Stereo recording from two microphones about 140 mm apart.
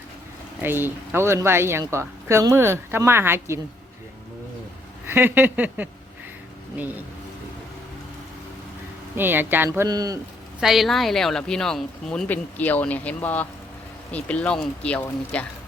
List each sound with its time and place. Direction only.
0.6 s speech: 15° right (ahead or behind)
5.0 s speech: 15° right (ahead or behind)
9.1 s speech: 15° right (ahead or behind)
9.6 s speech: 25° right (ahead or behind)
10.6 s speech: centre (ahead or behind)